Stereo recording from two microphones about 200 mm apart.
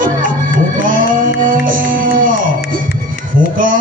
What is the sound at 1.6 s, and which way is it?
Music, 45° right (ahead or behind).